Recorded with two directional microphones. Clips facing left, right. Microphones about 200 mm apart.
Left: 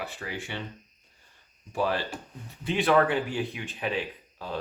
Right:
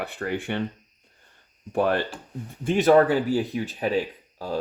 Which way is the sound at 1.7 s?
55° right (ahead or behind).